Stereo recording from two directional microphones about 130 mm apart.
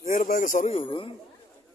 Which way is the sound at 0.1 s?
90° left.